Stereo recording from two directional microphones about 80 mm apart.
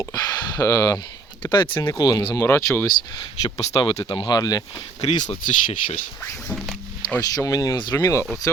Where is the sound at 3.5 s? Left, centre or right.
Left.